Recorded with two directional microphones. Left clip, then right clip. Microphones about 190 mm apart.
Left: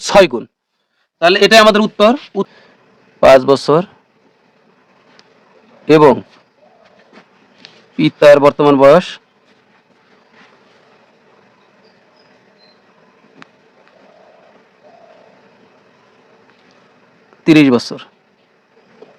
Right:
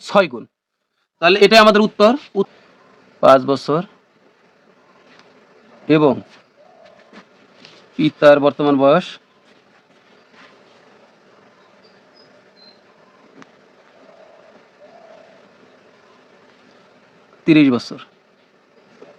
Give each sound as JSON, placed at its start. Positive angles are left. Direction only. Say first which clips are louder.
{"t": 0.0, "sound": "speech", "louder": "left 7 dB", "side_deg": 50}
{"t": 3.2, "sound": "speech", "louder": "left 5 dB", "side_deg": 45}
{"t": 5.9, "sound": "speech", "louder": "left 7 dB", "side_deg": 45}
{"t": 7.9, "sound": "speech", "louder": "left 4 dB", "side_deg": 45}
{"t": 17.4, "sound": "speech", "louder": "left 4 dB", "side_deg": 45}